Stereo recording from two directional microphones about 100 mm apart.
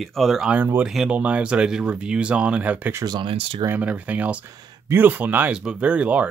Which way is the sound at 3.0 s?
55° right (ahead or behind).